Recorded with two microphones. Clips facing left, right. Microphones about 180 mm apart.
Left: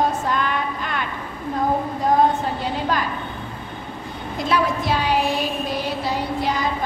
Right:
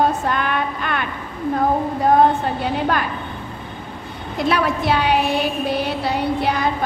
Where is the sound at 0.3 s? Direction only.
60° right (ahead or behind).